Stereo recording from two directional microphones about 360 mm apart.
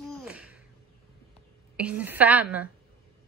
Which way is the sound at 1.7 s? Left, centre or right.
Centre.